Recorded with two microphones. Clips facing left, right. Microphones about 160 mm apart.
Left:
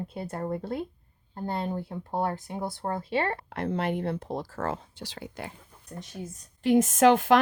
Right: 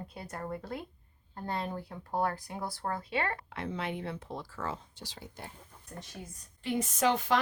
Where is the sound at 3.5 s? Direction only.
45° left (ahead or behind); by 5.5 s 80° left.